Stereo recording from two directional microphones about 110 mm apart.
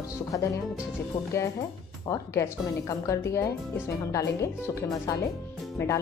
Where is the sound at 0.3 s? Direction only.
30° left (ahead or behind).